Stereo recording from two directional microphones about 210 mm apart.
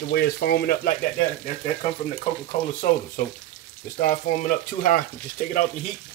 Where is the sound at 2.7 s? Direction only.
35° left (ahead or behind).